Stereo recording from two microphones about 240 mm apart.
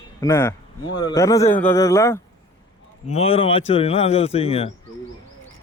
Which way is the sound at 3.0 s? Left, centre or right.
Left.